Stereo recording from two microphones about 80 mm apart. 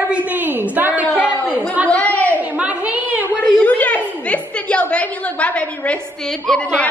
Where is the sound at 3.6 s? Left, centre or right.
Centre.